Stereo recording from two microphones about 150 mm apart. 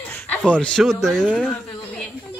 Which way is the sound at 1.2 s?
5° right (ahead or behind).